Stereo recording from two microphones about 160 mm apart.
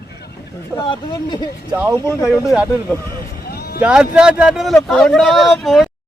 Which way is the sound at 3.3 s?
75° left (ahead or behind).